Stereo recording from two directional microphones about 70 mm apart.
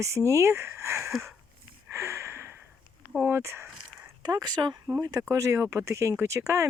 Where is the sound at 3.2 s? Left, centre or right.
Right.